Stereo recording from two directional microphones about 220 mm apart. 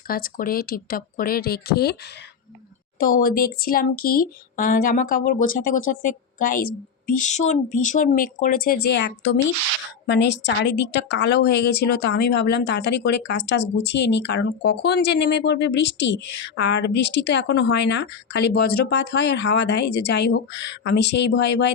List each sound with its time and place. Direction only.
0.1 s speech: 40° left (ahead or behind)
3.0 s speech: 40° left (ahead or behind)
10.4 s speech: 50° left (ahead or behind)